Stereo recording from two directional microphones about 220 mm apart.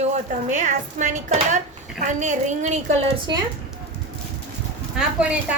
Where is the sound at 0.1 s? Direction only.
30° right (ahead or behind).